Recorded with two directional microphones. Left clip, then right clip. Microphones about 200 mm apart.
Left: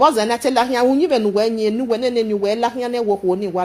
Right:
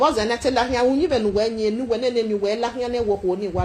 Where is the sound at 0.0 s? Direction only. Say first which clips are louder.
Left 4 dB; 55° left (ahead or behind).